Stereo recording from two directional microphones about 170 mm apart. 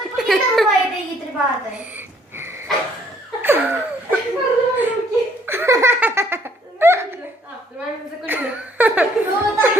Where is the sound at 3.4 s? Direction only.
10° right (ahead or behind).